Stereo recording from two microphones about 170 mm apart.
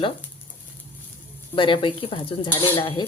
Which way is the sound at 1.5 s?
30° left (ahead or behind).